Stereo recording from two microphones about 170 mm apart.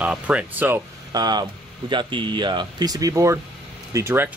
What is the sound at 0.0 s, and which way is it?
Speech, 5° right (ahead or behind).